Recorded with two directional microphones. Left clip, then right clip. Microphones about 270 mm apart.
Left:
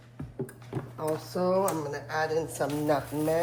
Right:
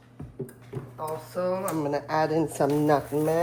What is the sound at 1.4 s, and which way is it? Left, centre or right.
Speech, centre.